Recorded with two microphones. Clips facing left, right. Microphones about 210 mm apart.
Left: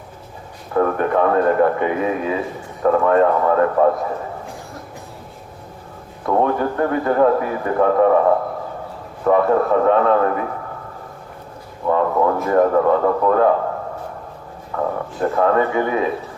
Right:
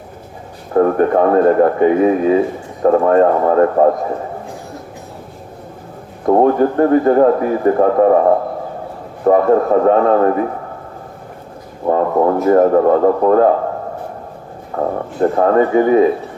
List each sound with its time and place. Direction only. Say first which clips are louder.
0.7 s a man's voice: right 5 dB; 40° right (ahead or behind)
6.2 s a man's voice: right 7 dB; 40° right (ahead or behind)
9.2 s a man's voice: right 4 dB; 40° right (ahead or behind)
11.9 s a man's voice: right 4 dB; 35° right (ahead or behind)
14.8 s a man's voice: right 5 dB; 35° right (ahead or behind)